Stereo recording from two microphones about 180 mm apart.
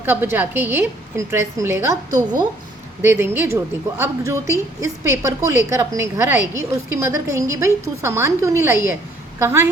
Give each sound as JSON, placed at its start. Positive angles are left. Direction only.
{"t": 0.0, "sound": "a woman's voice", "side_deg": -10}